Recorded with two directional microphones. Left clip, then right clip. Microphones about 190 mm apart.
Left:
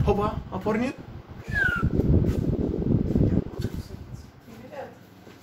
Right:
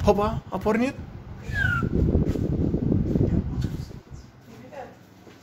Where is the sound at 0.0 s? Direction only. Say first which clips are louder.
Right 3 dB; 55° right (ahead or behind).